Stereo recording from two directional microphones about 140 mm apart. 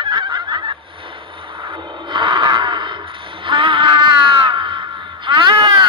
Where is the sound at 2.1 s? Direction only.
35° right (ahead or behind).